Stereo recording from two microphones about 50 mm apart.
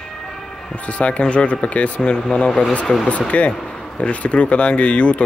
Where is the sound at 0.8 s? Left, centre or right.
Left.